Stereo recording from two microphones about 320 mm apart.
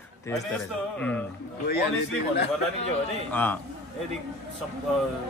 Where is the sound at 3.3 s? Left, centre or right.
Centre.